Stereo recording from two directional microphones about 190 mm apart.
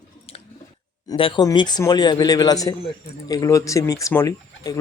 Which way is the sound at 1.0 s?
25° left (ahead or behind).